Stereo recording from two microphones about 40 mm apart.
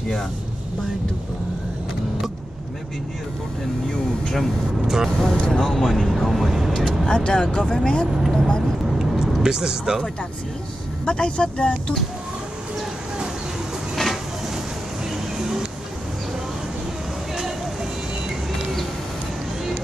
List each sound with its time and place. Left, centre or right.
3.9 s speech: centre
4.8 s speech: centre
5.1 s speech: centre
7.1 s speech: centre
8.2 s speech: centre
9.4 s speech: centre
11.1 s speech: left